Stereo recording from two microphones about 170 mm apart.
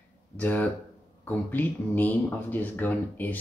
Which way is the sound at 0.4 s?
10° left (ahead or behind).